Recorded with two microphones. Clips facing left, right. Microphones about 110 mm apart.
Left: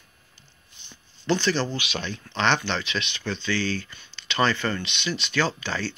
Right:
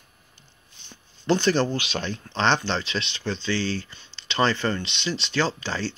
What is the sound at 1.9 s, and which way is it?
Speech, 35° right (ahead or behind).